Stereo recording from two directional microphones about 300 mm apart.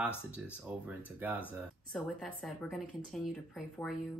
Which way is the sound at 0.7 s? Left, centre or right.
Centre.